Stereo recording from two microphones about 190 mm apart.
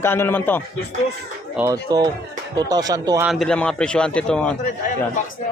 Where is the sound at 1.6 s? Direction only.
15° right (ahead or behind).